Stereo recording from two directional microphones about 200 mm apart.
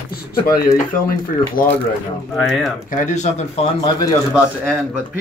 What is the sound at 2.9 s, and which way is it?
Speech, 40° left (ahead or behind).